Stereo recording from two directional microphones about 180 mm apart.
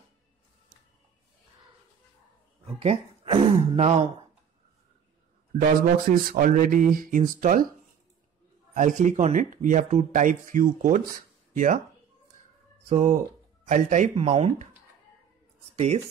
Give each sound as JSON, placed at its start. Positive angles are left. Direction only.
{"t": 2.6, "sound": "speech", "side_deg": -35}
{"t": 5.5, "sound": "speech", "side_deg": -55}
{"t": 8.7, "sound": "speech", "side_deg": -45}
{"t": 12.8, "sound": "speech", "side_deg": -40}